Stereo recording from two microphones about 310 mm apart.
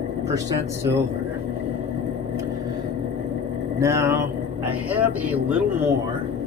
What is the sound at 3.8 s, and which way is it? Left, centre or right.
Speech, centre.